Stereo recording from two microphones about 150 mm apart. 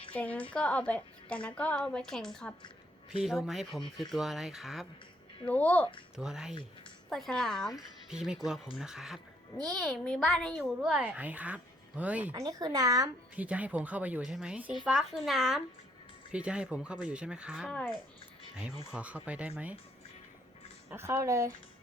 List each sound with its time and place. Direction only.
0.1 s a woman's voice: 10° left (ahead or behind)
5.5 s a woman's voice: 10° left (ahead or behind)
6.1 s a woman's voice: 5° right (ahead or behind)
12.3 s speech: 25° right (ahead or behind)
13.3 s a woman's voice: 10° right (ahead or behind)
18.9 s a woman's voice: 10° right (ahead or behind)
20.9 s speech: 20° right (ahead or behind)